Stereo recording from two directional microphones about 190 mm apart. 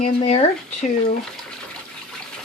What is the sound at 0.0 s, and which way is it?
Speech, 30° left (ahead or behind).